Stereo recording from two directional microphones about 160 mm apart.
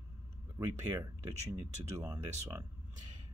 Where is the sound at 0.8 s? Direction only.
15° right (ahead or behind).